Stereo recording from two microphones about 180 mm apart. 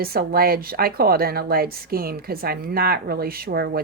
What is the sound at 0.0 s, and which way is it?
A woman's voice, 55° right (ahead or behind).